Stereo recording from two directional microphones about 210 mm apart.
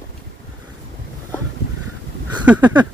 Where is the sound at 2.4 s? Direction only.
5° right (ahead or behind).